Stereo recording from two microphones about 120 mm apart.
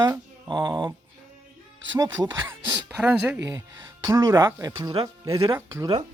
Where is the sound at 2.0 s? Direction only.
25° right (ahead or behind).